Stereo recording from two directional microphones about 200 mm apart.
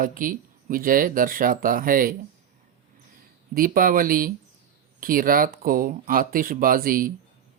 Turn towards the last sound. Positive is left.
turn(degrees=-45)  # may be behind; listen again after turning